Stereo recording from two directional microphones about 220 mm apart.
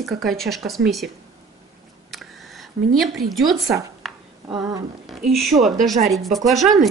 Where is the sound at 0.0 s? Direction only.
Centre (ahead or behind).